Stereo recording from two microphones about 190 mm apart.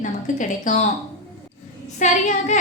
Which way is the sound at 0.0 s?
45° left (ahead or behind).